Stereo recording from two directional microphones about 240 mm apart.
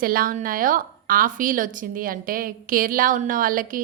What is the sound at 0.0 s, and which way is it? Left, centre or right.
A woman's voice, right.